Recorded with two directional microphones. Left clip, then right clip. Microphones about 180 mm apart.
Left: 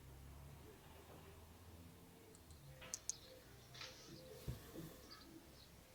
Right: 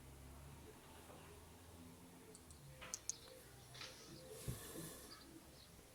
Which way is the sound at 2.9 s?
Centre (ahead or behind).